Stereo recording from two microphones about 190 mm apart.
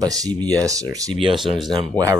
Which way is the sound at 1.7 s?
20° right (ahead or behind).